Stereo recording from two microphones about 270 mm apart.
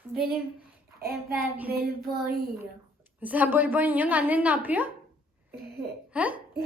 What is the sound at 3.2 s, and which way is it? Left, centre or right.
A woman's voice, centre.